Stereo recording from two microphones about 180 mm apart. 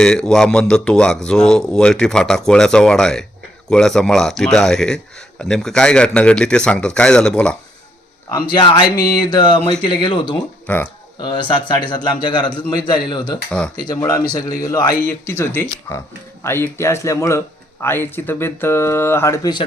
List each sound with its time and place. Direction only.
0.0 s a man's voice: 5° left (ahead or behind)
8.5 s speech: 25° left (ahead or behind)